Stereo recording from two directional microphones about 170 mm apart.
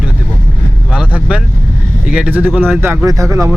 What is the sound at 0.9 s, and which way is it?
Speech, 5° right (ahead or behind).